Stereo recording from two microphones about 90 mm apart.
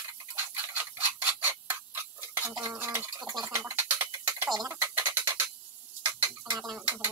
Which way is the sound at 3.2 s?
45° right (ahead or behind).